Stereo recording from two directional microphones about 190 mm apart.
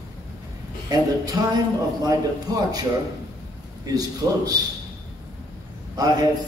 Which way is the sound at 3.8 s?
20° right (ahead or behind).